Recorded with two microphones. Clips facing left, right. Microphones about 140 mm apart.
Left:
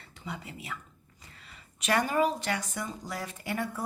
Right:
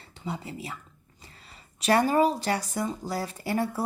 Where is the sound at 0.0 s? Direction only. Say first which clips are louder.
Right 5 dB; 30° right (ahead or behind).